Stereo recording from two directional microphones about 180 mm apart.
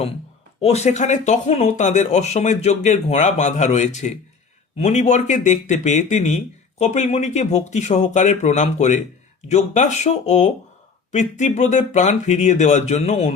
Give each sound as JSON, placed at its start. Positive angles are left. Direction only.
{"t": 0.6, "sound": "speech", "side_deg": 35}